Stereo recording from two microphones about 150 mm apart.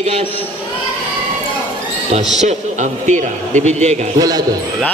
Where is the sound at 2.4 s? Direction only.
50° right (ahead or behind).